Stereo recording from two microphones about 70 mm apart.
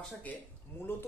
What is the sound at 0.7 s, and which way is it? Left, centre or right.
Speech, left.